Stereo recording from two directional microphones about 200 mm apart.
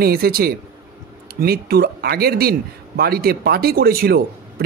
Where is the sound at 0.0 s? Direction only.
50° right (ahead or behind).